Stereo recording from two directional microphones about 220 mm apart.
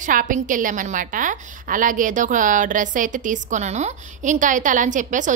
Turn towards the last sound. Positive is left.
turn(degrees=-35)  # may be behind; listen again after turning